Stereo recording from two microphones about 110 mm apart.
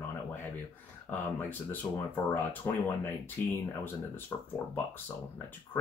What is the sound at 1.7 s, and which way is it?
Speech, 15° left (ahead or behind).